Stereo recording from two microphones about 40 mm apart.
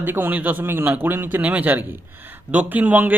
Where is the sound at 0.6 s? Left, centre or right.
Right.